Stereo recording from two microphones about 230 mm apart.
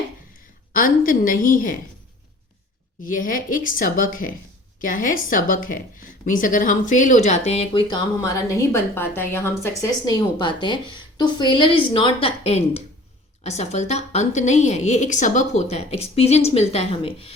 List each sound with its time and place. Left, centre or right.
0.7 s a woman's voice: left
3.0 s a woman's voice: left